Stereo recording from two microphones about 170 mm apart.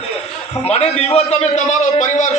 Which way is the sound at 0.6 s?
35° left (ahead or behind).